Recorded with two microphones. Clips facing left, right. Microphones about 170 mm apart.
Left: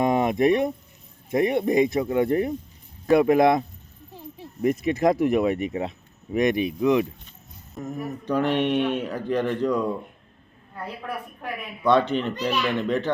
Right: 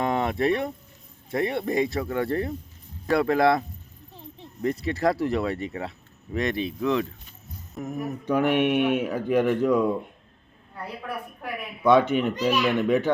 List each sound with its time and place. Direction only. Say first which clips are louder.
0.0 s a sound: left 4 dB; 15° left (ahead or behind)
1.3 s speech: left 5 dB; 20° left (ahead or behind)
7.8 s a child's voice: right 1 dB; centre (ahead or behind)
11.8 s a child's voice: right 1 dB; 5° right (ahead or behind)
12.0 s speech: right 2 dB; 15° right (ahead or behind)
12.3 s a child's voice: right 2 dB; centre (ahead or behind)